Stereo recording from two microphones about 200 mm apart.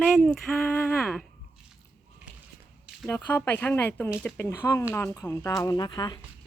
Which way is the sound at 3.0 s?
10° left (ahead or behind).